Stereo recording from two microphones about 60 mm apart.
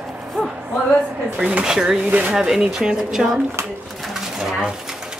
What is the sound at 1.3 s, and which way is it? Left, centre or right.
Speech, centre.